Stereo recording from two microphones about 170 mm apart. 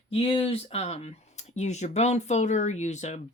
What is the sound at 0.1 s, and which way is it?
Speech, 35° left (ahead or behind).